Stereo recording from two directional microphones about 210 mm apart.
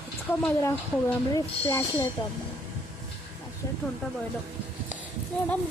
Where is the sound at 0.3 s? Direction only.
10° left (ahead or behind).